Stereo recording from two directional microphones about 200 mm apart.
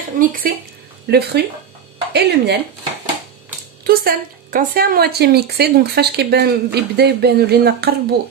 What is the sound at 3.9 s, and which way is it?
Speech, 45° right (ahead or behind).